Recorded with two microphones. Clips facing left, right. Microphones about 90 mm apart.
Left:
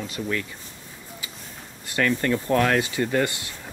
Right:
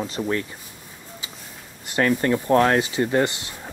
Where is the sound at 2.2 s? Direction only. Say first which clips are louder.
Right 5 dB; 25° right (ahead or behind).